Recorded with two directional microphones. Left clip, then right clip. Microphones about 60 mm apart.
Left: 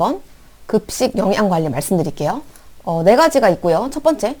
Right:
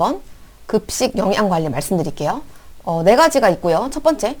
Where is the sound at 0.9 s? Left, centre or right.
Left.